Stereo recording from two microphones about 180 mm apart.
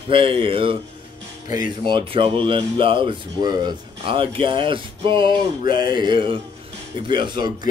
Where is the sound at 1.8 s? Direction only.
25° right (ahead or behind).